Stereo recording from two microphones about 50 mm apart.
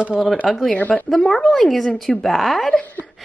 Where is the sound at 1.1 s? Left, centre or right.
Centre.